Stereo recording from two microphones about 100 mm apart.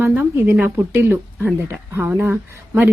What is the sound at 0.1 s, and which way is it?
A woman's voice, 20° right (ahead or behind).